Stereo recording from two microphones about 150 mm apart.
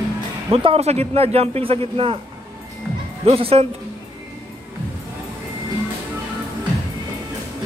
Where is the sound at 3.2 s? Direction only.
40° right (ahead or behind).